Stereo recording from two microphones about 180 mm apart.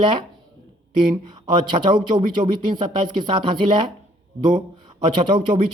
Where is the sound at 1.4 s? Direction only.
25° right (ahead or behind).